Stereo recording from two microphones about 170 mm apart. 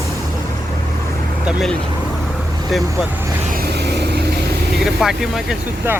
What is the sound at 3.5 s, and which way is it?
Vehicle, 70° right (ahead or behind).